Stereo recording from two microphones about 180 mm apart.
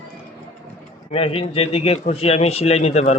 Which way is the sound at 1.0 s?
30° left (ahead or behind).